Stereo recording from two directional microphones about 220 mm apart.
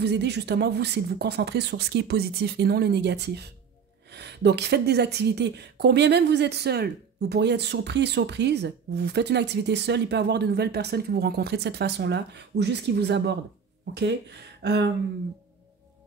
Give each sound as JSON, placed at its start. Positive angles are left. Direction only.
{"t": 0.0, "sound": "a woman's voice", "side_deg": -50}